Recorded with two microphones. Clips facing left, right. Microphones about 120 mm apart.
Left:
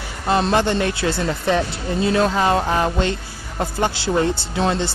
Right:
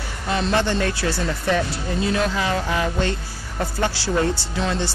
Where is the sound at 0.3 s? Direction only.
40° left (ahead or behind).